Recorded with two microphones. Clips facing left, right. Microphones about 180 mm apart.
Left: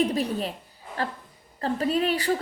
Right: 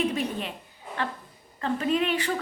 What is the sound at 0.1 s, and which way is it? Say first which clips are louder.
Speech: left 3 dB; 35° left (ahead or behind).